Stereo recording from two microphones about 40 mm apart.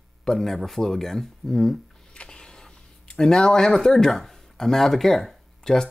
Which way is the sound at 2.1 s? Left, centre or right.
Left.